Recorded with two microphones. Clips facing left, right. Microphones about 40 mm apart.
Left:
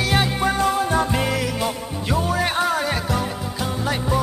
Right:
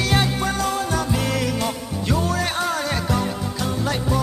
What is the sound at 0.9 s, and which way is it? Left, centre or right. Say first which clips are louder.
Music: left 3 dB; left.